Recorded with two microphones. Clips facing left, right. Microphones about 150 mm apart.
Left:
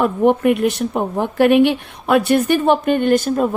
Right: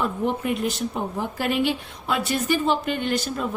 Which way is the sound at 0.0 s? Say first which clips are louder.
Left 10 dB; 65° left (ahead or behind).